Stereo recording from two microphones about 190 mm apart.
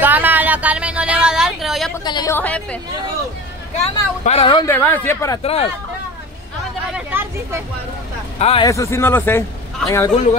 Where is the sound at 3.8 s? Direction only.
30° left (ahead or behind).